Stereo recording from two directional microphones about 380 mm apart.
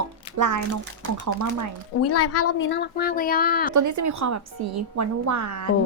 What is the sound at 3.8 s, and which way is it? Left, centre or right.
Speech, right.